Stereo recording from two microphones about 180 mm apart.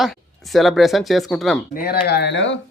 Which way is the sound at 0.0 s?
Centre (ahead or behind).